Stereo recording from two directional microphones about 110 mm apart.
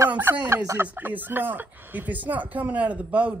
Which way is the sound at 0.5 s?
25° right (ahead or behind).